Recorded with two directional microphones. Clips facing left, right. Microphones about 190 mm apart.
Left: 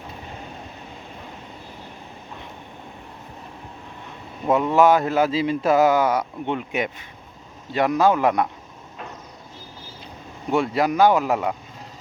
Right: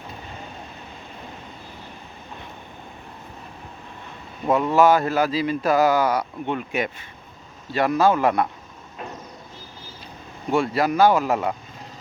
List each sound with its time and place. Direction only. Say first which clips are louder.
4.4 s speech: left 1 dB; centre (ahead or behind)
4.7 s speech: even; 20° left (ahead or behind)
10.5 s speech: even; 20° left (ahead or behind)